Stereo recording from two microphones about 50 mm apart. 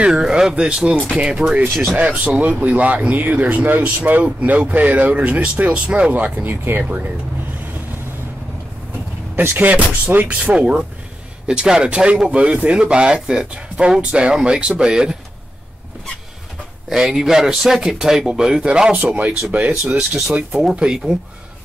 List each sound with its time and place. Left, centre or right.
0.1 s speech: centre
2.0 s speech: right
6.1 s speech: right
6.5 s speech: right
9.3 s speech: right
9.6 s speech: right
10.2 s speech: right
16.9 s speech: centre
19.5 s speech: right; by 21.2 s centre